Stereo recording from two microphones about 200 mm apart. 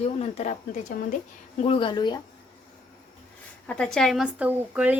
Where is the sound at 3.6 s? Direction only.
5° left (ahead or behind).